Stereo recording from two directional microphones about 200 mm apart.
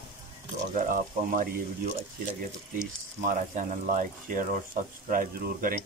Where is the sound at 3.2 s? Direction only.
40° right (ahead or behind).